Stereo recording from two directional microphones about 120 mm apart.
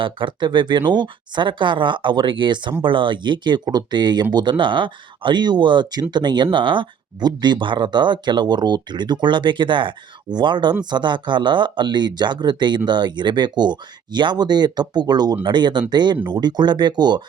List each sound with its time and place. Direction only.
0.0 s speech: 45° right (ahead or behind)